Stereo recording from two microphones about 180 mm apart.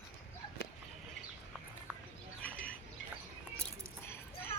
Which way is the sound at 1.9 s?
5° right (ahead or behind).